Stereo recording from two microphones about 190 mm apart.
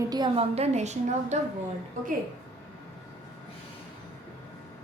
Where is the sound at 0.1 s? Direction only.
25° right (ahead or behind).